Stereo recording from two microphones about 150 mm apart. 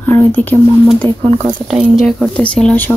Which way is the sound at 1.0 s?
35° right (ahead or behind).